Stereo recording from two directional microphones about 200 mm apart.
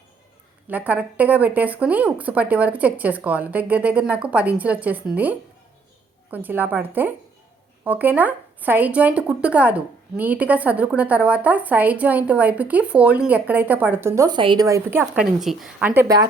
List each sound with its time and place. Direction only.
0.7 s speech: 10° right (ahead or behind)
14.2 s a woman's voice: 20° right (ahead or behind)